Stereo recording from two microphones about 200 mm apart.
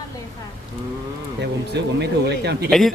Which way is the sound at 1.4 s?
55° right (ahead or behind).